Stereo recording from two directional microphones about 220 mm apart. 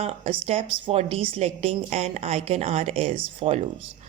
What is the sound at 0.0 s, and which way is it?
A woman's voice, 30° right (ahead or behind).